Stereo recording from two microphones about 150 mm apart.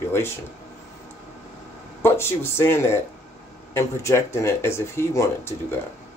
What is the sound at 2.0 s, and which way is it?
Speech, 15° left (ahead or behind).